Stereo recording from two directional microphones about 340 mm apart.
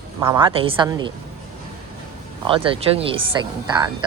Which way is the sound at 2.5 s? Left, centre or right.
Centre.